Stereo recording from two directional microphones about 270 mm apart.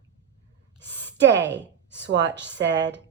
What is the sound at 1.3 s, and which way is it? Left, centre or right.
Speech, centre.